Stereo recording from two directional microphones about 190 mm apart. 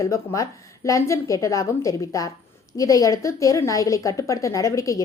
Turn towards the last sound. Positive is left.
turn(degrees=15)  # may be behind; listen again after turning